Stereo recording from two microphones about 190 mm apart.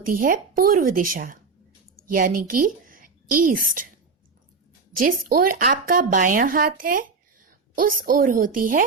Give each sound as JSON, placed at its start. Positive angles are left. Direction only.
{"t": 0.0, "sound": "a woman's voice", "side_deg": -50}
{"t": 4.9, "sound": "speech", "side_deg": -45}